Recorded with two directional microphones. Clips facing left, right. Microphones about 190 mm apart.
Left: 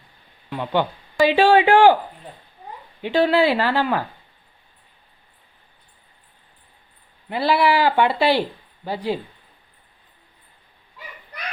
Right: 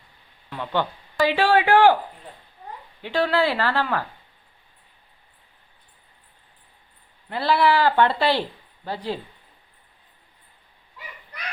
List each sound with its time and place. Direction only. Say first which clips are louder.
0.5 s speech: left 4 dB; 15° left (ahead or behind)
3.0 s speech: left 4 dB; 20° left (ahead or behind)
7.3 s speech: left 1 dB; 10° left (ahead or behind)